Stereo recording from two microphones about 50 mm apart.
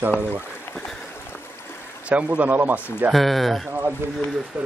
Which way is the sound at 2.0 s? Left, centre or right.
Right.